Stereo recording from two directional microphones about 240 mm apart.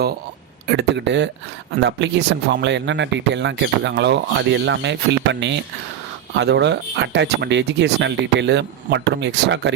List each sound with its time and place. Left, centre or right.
0.7 s speech: right